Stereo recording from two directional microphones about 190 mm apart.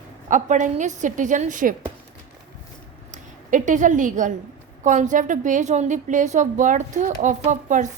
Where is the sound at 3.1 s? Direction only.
40° right (ahead or behind).